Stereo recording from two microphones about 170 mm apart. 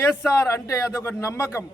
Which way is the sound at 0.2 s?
15° left (ahead or behind).